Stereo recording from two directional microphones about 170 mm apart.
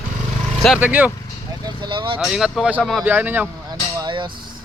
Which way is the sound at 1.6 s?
30° right (ahead or behind).